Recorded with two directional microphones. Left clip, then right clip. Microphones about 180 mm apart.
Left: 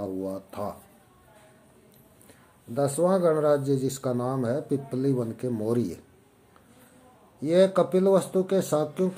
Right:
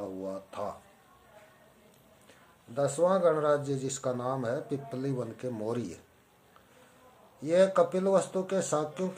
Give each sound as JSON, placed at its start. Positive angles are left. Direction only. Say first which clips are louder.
{"t": 0.0, "sound": "a sound", "louder": "left 5 dB", "side_deg": 35}
{"t": 2.7, "sound": "speech", "louder": "left 3 dB", "side_deg": 35}
{"t": 7.3, "sound": "speech", "louder": "left 3 dB", "side_deg": 35}